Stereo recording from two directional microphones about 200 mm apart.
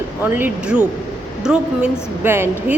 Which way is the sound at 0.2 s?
10° right (ahead or behind).